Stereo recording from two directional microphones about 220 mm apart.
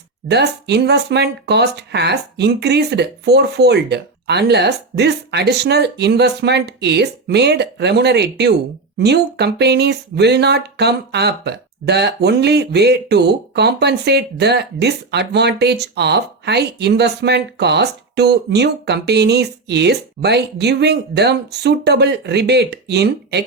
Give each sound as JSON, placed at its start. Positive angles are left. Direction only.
{"t": 0.3, "sound": "speech", "side_deg": -50}